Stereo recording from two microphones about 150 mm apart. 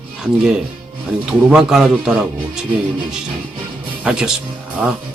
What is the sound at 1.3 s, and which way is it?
Speech, 5° right (ahead or behind).